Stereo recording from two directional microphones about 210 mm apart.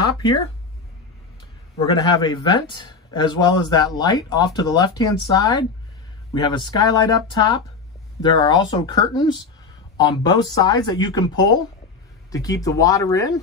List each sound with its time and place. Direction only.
1.8 s speech: 20° left (ahead or behind)